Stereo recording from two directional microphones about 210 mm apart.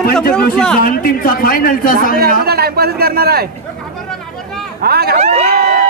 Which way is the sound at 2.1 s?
45° right (ahead or behind).